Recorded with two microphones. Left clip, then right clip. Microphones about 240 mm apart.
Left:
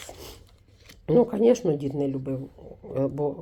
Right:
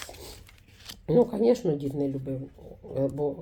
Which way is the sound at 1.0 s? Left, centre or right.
Left.